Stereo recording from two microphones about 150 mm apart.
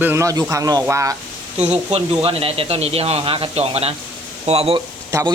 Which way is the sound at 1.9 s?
40° right (ahead or behind).